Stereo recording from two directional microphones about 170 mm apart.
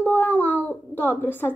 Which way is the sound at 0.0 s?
10° left (ahead or behind).